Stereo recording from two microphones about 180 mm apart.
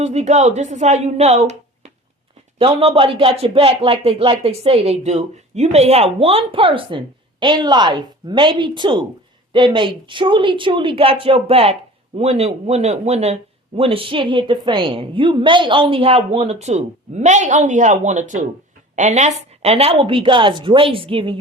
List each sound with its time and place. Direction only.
0.0 s a woman's voice: 40° right (ahead or behind)